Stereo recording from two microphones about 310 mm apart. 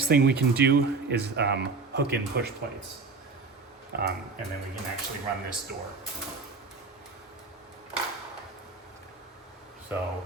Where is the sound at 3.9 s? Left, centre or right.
Right.